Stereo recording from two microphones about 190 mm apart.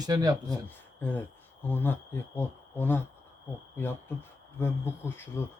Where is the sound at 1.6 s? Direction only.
10° left (ahead or behind).